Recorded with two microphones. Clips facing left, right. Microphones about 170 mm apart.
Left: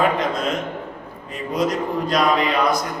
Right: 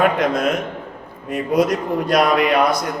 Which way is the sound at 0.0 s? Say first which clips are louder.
Right 3 dB; 65° right (ahead or behind).